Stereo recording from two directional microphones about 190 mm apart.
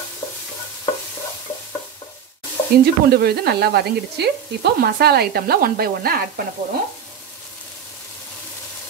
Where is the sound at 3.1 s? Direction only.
55° right (ahead or behind).